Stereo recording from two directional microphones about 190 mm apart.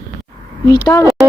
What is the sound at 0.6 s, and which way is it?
Speech, 15° left (ahead or behind).